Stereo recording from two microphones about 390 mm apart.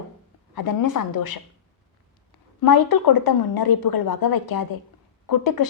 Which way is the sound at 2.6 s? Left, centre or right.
Left.